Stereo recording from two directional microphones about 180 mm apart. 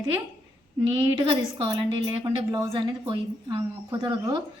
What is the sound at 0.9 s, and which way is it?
A woman's voice, 25° right (ahead or behind).